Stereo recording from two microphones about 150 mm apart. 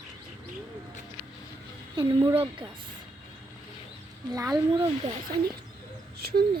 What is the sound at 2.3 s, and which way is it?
Speech, 30° right (ahead or behind).